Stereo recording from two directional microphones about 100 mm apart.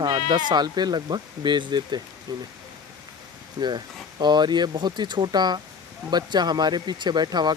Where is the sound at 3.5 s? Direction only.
45° right (ahead or behind).